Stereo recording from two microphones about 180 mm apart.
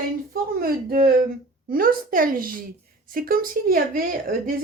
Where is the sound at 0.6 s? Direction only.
55° right (ahead or behind).